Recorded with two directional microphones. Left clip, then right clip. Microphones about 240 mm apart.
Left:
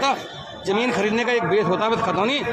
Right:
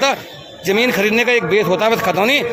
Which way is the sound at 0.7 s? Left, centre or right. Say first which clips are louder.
Right 6 dB; right.